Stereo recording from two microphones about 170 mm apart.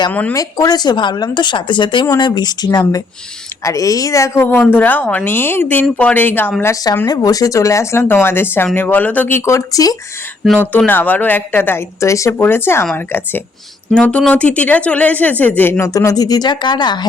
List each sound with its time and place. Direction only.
0.1 s speech: 10° left (ahead or behind)
0.3 s speech: 20° left (ahead or behind)
10.7 s speech: 10° left (ahead or behind); by 17.1 s 25° left (ahead or behind)